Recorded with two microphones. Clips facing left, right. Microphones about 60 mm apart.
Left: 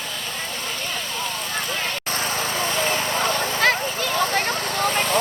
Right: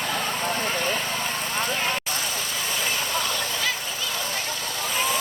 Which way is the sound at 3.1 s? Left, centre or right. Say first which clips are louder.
Left 5 dB; left.